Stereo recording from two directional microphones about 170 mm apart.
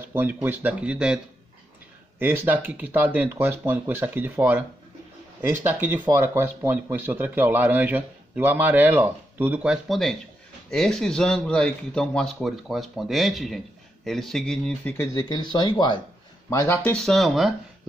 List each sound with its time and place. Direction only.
0.0 s a man's voice: 10° right (ahead or behind); by 15.0 s 10° left (ahead or behind)
15.1 s speech: 25° left (ahead or behind)
16.4 s speech: 15° left (ahead or behind)